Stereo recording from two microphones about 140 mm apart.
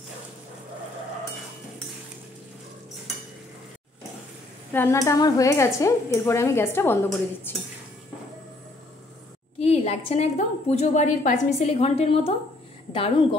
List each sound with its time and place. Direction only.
4.7 s speech: 20° left (ahead or behind)
9.6 s a woman's voice: 50° left (ahead or behind)